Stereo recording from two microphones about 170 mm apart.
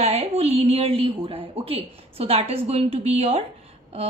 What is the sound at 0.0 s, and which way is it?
A woman's voice, 35° right (ahead or behind).